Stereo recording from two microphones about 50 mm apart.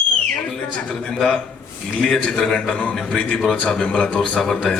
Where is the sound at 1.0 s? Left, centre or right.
Centre.